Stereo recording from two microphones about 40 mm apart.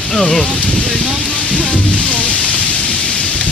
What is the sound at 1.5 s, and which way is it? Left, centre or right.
Thunder, left.